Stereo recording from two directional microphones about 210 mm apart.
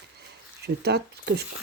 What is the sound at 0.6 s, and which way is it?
Speech, 50° right (ahead or behind).